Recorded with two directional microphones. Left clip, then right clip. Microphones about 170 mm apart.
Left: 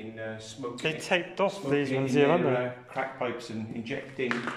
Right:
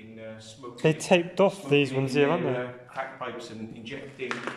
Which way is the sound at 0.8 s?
25° right (ahead or behind).